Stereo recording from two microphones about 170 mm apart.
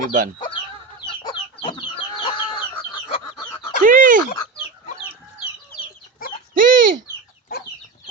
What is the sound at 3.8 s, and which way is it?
Dog, 50° right (ahead or behind).